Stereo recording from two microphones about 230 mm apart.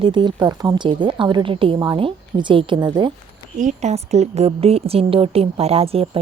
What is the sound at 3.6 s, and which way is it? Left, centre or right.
A woman's voice, right.